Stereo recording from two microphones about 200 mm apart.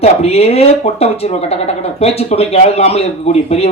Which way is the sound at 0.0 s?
30° left (ahead or behind).